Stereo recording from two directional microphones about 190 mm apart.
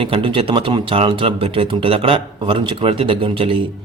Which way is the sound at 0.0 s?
25° right (ahead or behind).